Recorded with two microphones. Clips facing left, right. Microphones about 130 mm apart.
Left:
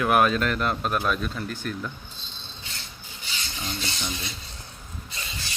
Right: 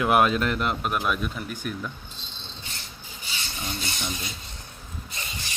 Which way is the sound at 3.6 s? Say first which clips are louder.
Even; 15° right (ahead or behind).